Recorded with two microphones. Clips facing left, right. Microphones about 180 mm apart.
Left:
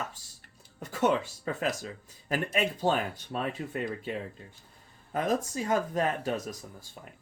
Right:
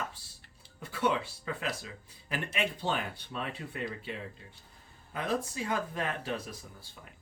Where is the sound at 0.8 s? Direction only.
45° left (ahead or behind).